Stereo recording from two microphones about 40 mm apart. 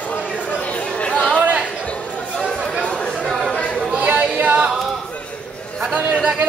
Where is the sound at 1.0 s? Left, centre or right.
Left.